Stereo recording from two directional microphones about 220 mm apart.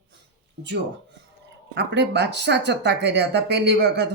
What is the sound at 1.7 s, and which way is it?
Speech, 50° right (ahead or behind).